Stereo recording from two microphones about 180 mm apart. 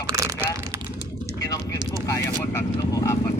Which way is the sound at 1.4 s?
20° left (ahead or behind).